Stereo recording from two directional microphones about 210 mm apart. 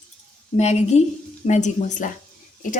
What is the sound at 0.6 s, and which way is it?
Speech, 30° left (ahead or behind).